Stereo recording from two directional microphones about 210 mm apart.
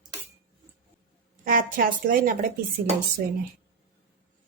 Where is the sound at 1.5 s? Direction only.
40° right (ahead or behind).